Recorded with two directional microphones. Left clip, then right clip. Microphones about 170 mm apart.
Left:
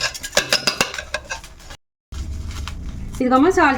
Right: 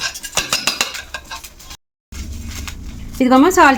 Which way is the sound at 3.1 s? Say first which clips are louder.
Right 4 dB; 60° right (ahead or behind).